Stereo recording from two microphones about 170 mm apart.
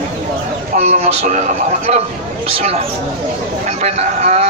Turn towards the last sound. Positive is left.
turn(degrees=-40)  # may be behind; listen again after turning